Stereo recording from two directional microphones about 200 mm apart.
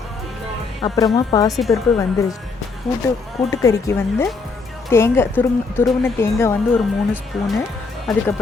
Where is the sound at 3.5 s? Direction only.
15° left (ahead or behind).